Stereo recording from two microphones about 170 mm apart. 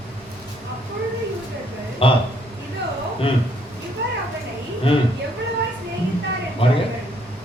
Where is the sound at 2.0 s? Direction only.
35° left (ahead or behind).